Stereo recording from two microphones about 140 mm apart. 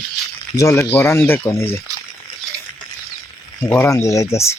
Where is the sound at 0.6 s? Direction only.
20° left (ahead or behind).